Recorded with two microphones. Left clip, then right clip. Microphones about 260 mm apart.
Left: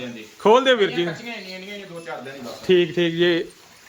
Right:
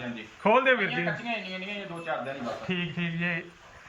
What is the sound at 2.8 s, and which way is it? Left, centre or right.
Speech, left.